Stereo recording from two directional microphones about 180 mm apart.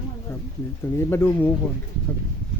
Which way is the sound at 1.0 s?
15° left (ahead or behind).